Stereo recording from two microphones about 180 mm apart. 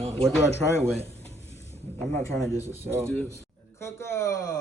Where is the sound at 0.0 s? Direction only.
35° right (ahead or behind).